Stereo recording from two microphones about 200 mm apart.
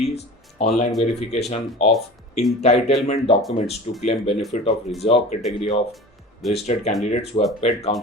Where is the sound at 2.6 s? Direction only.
30° left (ahead or behind).